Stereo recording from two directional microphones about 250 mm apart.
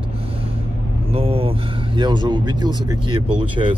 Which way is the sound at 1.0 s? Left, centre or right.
Right.